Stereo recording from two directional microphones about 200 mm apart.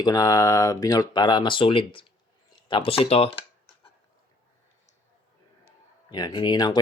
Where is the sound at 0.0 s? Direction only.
20° left (ahead or behind).